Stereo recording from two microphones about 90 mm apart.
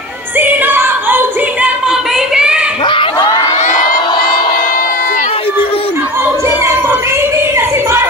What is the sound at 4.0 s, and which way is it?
Crowd, 55° left (ahead or behind).